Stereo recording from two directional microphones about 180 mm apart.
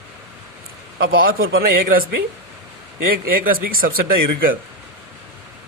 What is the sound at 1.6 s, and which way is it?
Speech, 55° right (ahead or behind).